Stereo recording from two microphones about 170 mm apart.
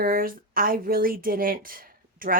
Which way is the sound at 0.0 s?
55° right (ahead or behind).